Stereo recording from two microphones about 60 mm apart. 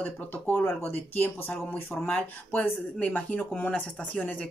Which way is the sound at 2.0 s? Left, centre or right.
Left.